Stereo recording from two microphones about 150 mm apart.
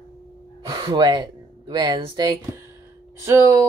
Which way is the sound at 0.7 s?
30° right (ahead or behind).